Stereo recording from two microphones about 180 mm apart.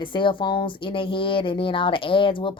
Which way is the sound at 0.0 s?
25° left (ahead or behind).